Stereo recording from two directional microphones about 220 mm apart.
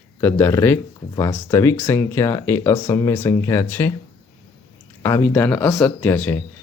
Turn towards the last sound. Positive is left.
turn(degrees=10)  # may be behind; listen again after turning